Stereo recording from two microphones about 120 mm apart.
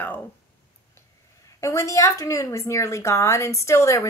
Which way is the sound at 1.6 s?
25° left (ahead or behind).